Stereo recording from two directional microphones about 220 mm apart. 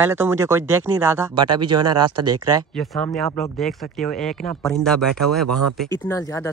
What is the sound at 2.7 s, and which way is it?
Speech, 5° left (ahead or behind).